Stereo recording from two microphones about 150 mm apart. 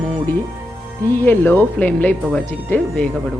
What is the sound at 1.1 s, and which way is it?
Speech, 15° left (ahead or behind).